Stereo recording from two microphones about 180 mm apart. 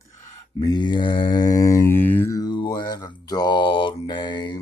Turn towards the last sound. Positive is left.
turn(degrees=25)  # may be behind; listen again after turning